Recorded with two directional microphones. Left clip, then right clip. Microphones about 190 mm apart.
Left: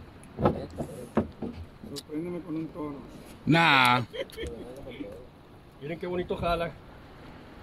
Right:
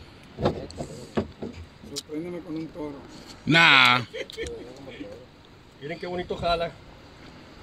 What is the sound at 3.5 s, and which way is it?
Speech, 10° left (ahead or behind).